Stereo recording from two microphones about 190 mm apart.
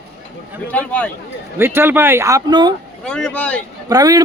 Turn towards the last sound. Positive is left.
turn(degrees=-20)  # may be behind; listen again after turning